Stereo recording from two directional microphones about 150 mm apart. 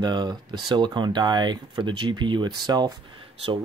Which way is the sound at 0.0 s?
30° right (ahead or behind).